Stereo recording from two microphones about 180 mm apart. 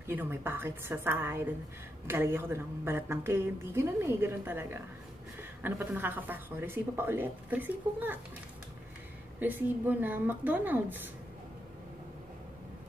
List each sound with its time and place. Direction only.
0.0 s a woman's voice: 10° right (ahead or behind)
9.4 s a woman's voice: 10° right (ahead or behind)